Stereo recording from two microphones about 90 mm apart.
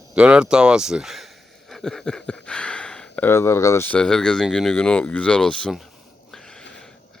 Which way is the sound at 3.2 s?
30° left (ahead or behind).